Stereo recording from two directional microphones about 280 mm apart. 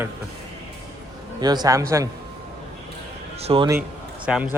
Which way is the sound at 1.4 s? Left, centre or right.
Centre.